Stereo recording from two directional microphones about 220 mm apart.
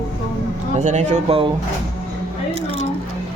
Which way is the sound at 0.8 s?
35° right (ahead or behind).